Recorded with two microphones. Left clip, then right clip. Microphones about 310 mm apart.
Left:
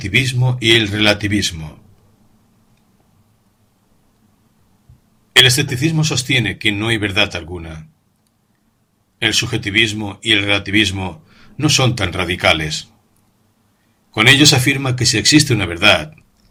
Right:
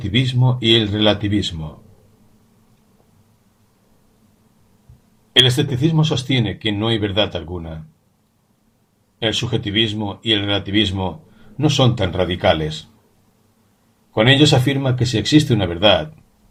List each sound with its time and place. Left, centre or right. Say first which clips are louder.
0.0 s speech: left 4 dB; left
5.4 s speech: left 3 dB; left
9.1 s speech: left 4 dB; left
14.1 s speech: left 3 dB; left